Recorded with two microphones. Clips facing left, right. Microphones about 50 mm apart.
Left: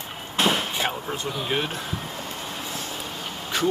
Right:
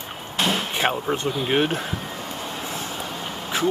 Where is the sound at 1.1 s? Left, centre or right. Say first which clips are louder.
Right 5 dB; right.